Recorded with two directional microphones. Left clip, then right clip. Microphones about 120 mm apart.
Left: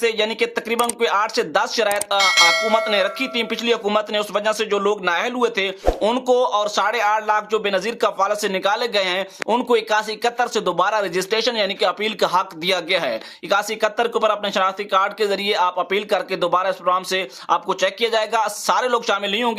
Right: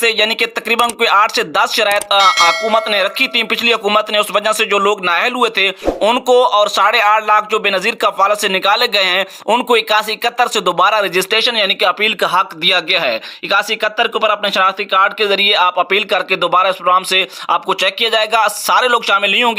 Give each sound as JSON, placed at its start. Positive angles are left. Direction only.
{"t": 0.0, "sound": "speech", "side_deg": -25}
{"t": 2.1, "sound": "speech", "side_deg": 0}
{"t": 2.9, "sound": "speech", "side_deg": -25}
{"t": 6.0, "sound": "speech", "side_deg": -10}
{"t": 6.3, "sound": "speech", "side_deg": -25}